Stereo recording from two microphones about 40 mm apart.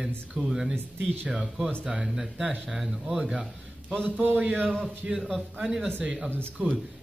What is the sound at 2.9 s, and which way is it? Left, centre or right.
Speech, right.